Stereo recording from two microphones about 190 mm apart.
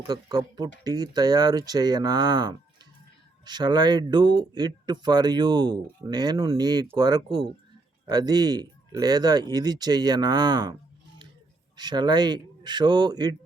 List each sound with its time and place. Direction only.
0.1 s speech: 20° right (ahead or behind)
11.8 s speech: 20° right (ahead or behind)